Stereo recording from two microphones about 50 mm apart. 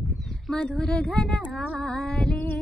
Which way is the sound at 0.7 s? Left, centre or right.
Centre.